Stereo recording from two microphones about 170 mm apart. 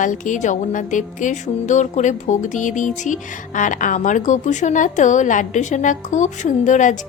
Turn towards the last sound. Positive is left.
turn(degrees=45)  # may be behind; listen again after turning